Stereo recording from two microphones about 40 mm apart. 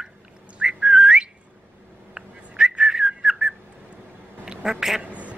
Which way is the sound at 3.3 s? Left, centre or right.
Centre.